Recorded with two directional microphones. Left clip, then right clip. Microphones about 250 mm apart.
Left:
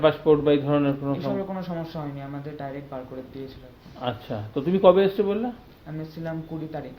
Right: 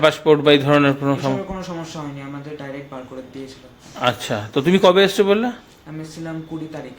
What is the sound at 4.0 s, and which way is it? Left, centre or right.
Speech, right.